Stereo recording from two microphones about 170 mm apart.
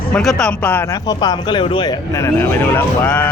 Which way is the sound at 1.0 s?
25° left (ahead or behind).